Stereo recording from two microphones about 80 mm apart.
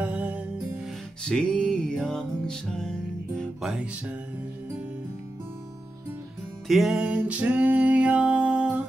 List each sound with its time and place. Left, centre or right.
0.0 s music: centre
1.2 s music: centre
3.6 s music: centre
6.7 s music: centre